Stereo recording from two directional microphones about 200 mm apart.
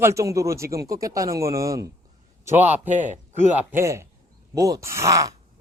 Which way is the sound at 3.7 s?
15° right (ahead or behind).